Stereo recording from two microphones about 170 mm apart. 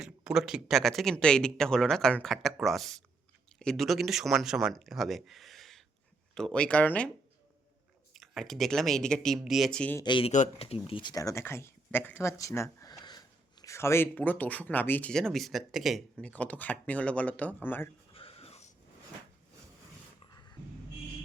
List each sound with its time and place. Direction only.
0.0 s speech: 5° right (ahead or behind)
8.1 s speech: centre (ahead or behind)
10.0 s speech: 30° left (ahead or behind)
10.3 s speech: 40° left (ahead or behind)
10.8 s speech: 30° left (ahead or behind); by 17.8 s 10° left (ahead or behind)
18.1 s a sound: 35° left (ahead or behind)
20.3 s a sound: 25° left (ahead or behind)